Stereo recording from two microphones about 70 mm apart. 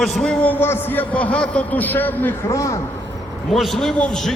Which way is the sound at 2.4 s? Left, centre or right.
Left.